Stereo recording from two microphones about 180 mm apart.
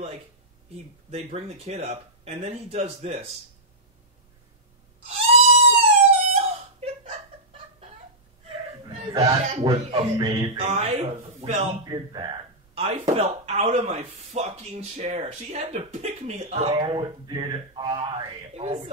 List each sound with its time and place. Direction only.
1.1 s speech: 35° right (ahead or behind)
5.0 s a sound: 35° right (ahead or behind)
8.8 s speech: 30° right (ahead or behind)
11.8 s speech: 25° right (ahead or behind)